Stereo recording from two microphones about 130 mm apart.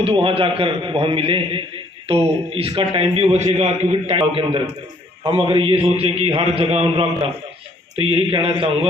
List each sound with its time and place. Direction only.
0.0 s a man's voice: 45° right (ahead or behind)